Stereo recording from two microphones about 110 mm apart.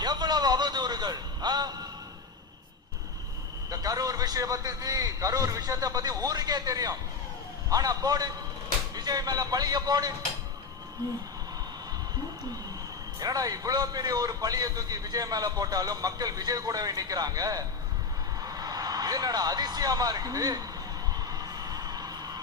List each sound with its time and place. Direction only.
0.0 s a sound: 40° right (ahead or behind)
3.7 s a man's voice: 35° right (ahead or behind)
13.1 s a man's voice: 35° right (ahead or behind)
21.2 s vehicle: 35° right (ahead or behind)